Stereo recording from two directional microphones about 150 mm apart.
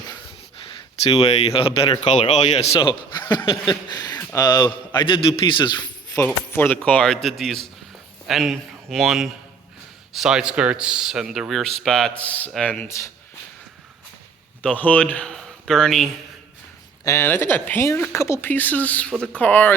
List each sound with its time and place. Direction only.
1.0 s a man's voice: 40° left (ahead or behind)
6.2 s speech: 15° left (ahead or behind)
14.6 s a man's voice: 10° left (ahead or behind)
17.0 s speech: 20° left (ahead or behind)